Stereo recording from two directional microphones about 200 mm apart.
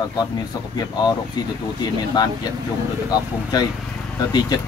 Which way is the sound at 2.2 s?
20° left (ahead or behind).